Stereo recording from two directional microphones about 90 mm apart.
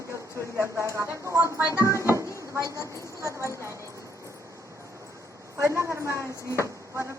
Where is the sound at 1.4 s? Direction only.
35° left (ahead or behind).